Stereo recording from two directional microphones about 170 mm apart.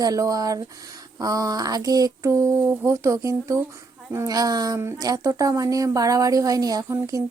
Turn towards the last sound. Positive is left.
turn(degrees=-20)  # may be behind; listen again after turning